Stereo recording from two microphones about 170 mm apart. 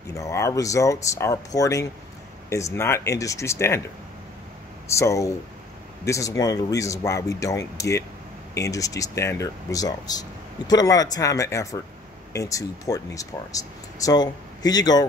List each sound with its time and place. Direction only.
0.1 s speech: 20° left (ahead or behind)
4.8 s speech: 15° left (ahead or behind)